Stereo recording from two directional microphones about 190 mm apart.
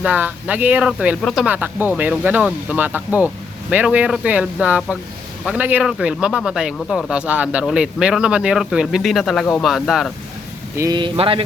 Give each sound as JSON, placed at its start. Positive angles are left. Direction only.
{"t": 0.0, "sound": "speech", "side_deg": -10}
{"t": 10.8, "sound": "speech", "side_deg": -20}